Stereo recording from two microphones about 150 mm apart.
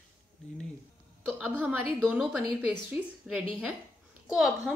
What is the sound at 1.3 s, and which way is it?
Speech, 10° right (ahead or behind).